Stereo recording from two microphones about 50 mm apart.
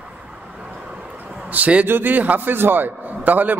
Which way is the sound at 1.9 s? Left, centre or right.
Right.